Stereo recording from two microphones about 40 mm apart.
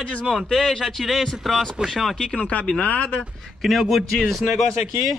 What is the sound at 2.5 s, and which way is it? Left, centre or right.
Speech, left.